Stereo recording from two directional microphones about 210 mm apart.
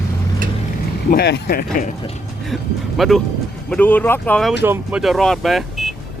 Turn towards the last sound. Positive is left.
turn(degrees=0)  # may be behind; listen again after turning